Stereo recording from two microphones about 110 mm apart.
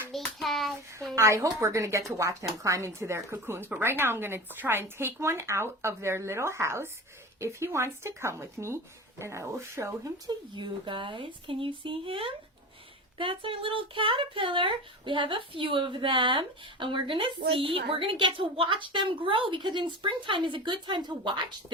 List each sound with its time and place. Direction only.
0.1 s hands: centre (ahead or behind)
1.1 s a woman's voice: 25° right (ahead or behind)
10.5 s speech: 45° right (ahead or behind)